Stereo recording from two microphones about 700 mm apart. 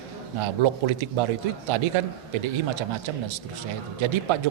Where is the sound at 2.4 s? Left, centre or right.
Right.